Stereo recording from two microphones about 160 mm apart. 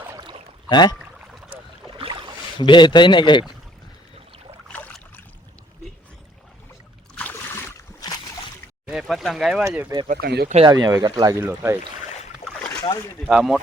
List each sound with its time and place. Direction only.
0.2 s rowboat: 30° right (ahead or behind)
0.7 s speech: 25° left (ahead or behind)
2.0 s boat: 35° right (ahead or behind)
2.6 s speech: 30° left (ahead or behind)
4.7 s boat: 10° left (ahead or behind)
7.2 s a sound: 10° left (ahead or behind)
8.9 s a sound: centre (ahead or behind)
10.1 s speech: 80° right
10.7 s speech: 25° right (ahead or behind)
12.4 s boat: 40° left (ahead or behind)
12.8 s speech: 25° left (ahead or behind)
13.2 s speech: 5° right (ahead or behind)